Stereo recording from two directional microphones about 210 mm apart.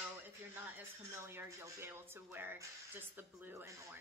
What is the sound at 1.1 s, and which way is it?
Speech, 10° right (ahead or behind).